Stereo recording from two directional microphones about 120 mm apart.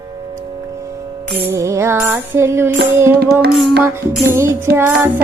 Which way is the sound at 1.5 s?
25° right (ahead or behind).